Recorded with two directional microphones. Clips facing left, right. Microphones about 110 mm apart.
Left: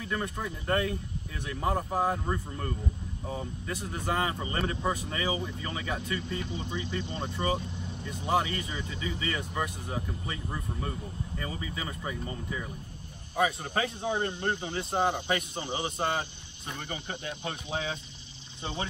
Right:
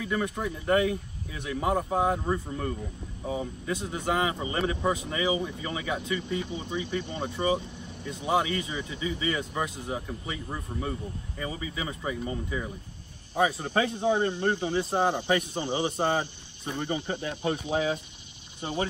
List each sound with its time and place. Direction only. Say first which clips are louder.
0.1 s speech: right 3 dB; 15° right (ahead or behind)
3.7 s speech: right 3 dB; 20° right (ahead or behind)
18.6 s speech: right 5 dB; 25° left (ahead or behind)